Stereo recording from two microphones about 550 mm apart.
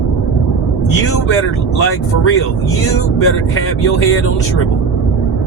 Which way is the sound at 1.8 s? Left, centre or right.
Left.